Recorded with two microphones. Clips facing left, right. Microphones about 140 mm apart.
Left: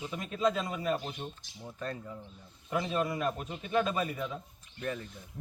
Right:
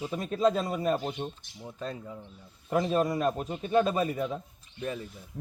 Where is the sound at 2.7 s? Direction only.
40° right (ahead or behind).